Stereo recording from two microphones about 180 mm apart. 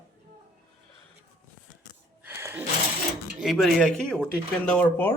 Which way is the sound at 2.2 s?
15° right (ahead or behind).